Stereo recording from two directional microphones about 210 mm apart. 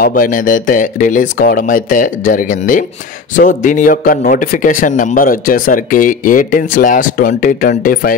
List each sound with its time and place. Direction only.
0.0 s speech: 40° left (ahead or behind)